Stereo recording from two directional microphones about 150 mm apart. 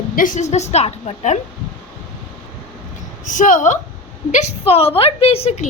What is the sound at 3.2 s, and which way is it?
A woman's voice, 60° left (ahead or behind).